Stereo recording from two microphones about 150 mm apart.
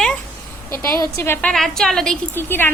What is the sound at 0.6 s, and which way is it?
Speech, 20° left (ahead or behind).